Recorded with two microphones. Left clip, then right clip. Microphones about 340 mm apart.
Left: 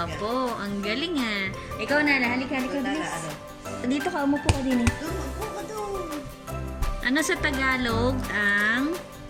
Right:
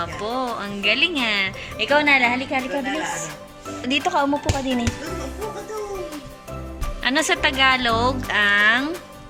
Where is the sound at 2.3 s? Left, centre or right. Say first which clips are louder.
Right 5 dB; right.